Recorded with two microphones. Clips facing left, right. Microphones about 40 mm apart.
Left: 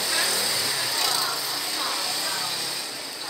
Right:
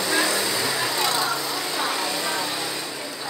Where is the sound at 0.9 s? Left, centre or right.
Right.